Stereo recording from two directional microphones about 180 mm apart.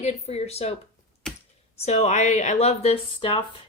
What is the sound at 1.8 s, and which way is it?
A woman's voice, 35° left (ahead or behind).